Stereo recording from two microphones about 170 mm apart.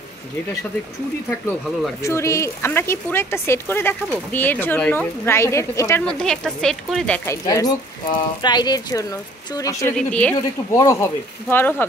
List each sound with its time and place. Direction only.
2.0 s speech: 15° left (ahead or behind)
6.0 s speech: 5° left (ahead or behind)
7.2 s speech: 20° left (ahead or behind)
9.9 s speech: 10° left (ahead or behind)
10.8 s speech: 20° left (ahead or behind)